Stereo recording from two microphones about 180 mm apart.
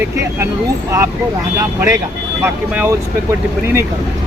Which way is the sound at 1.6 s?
15° right (ahead or behind).